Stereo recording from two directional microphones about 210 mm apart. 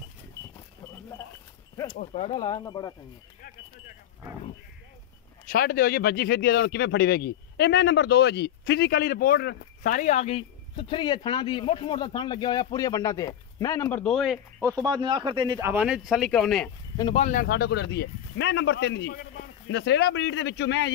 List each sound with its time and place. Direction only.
2.1 s speech: 25° left (ahead or behind)
5.5 s speech: 45° left (ahead or behind); by 14.4 s centre (ahead or behind)
14.6 s speech: 15° right (ahead or behind); by 16.7 s 5° left (ahead or behind)
16.9 s speech: 20° left (ahead or behind)
17.2 s speech: 40° left (ahead or behind); by 20.9 s 55° left (ahead or behind)